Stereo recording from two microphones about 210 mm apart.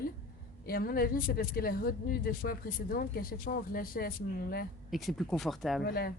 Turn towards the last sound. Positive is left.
turn(degrees=45)  # may be behind; listen again after turning